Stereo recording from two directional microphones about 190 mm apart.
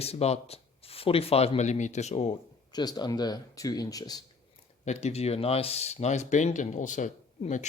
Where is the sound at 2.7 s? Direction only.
20° left (ahead or behind).